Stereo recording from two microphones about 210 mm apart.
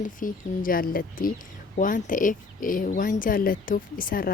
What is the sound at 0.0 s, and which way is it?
Speech, 40° left (ahead or behind).